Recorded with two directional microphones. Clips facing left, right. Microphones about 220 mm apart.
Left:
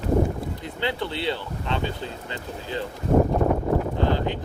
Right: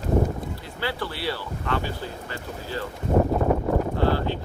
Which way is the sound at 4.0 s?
20° left (ahead or behind).